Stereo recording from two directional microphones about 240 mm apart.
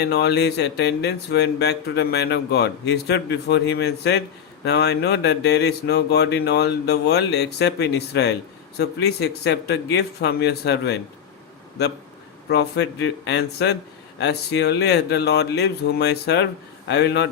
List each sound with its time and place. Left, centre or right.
0.0 s speech: left
12.5 s speech: left